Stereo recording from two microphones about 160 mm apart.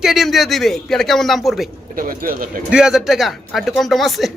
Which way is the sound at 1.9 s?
60° right (ahead or behind).